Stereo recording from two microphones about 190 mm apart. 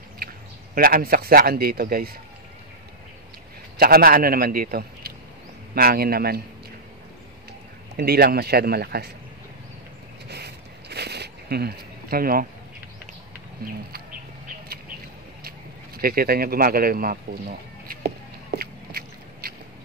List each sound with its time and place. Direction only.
0.7 s speech: 50° right (ahead or behind)
3.7 s speech: 50° right (ahead or behind)
7.9 s speech: 55° right (ahead or behind)
10.2 s a sound: 60° right (ahead or behind)
16.0 s speech: 50° right (ahead or behind)
18.5 s a sound: 55° right (ahead or behind)